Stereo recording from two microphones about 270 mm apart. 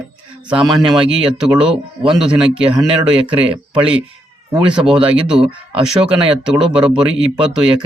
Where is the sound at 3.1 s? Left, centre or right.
Centre.